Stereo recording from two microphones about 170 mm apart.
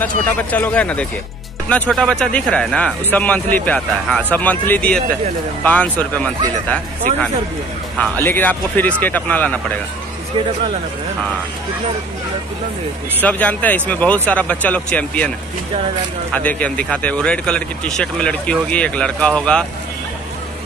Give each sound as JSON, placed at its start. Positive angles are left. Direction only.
{"t": 0.0, "sound": "speech", "side_deg": 10}
{"t": 8.0, "sound": "speech", "side_deg": 10}
{"t": 13.2, "sound": "speech", "side_deg": 10}
{"t": 16.3, "sound": "speech", "side_deg": 10}